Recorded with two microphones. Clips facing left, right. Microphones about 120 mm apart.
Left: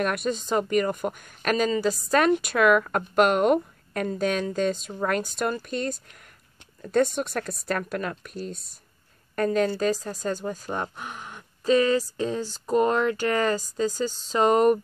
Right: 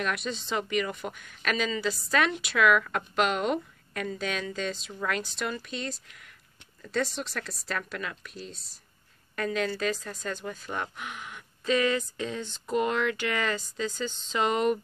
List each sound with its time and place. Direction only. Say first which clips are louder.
0.0 s a woman's voice: left 6 dB; 50° left (ahead or behind)